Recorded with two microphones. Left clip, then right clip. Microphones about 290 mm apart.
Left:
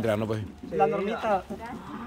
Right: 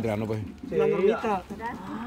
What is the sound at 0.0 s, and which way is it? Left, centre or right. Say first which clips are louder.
Speech: left 2 dB; centre.